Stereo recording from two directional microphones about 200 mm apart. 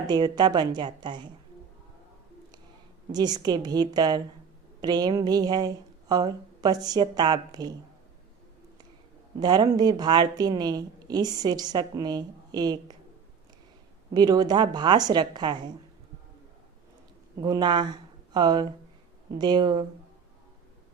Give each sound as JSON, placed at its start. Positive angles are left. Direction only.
{"t": 0.1, "sound": "a woman's voice", "side_deg": -20}
{"t": 3.1, "sound": "a woman's voice", "side_deg": -20}
{"t": 9.4, "sound": "a woman's voice", "side_deg": -20}
{"t": 14.1, "sound": "a woman's voice", "side_deg": -20}
{"t": 17.4, "sound": "a woman's voice", "side_deg": -20}